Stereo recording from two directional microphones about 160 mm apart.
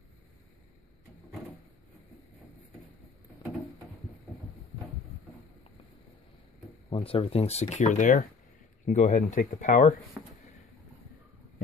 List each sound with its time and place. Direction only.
6.9 s speech: 40° left (ahead or behind)